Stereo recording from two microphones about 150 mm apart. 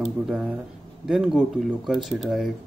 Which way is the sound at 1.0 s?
5° right (ahead or behind).